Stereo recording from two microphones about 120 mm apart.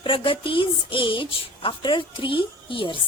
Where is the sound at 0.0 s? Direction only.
45° left (ahead or behind).